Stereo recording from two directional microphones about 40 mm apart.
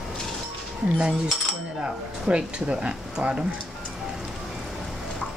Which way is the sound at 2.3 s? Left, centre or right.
Right.